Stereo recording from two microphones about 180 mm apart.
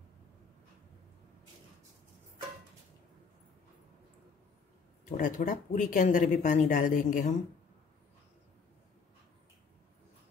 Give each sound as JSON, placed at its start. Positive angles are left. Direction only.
{"t": 5.1, "sound": "speech", "side_deg": 50}